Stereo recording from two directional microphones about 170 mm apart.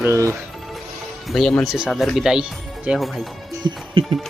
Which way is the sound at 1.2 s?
Centre (ahead or behind).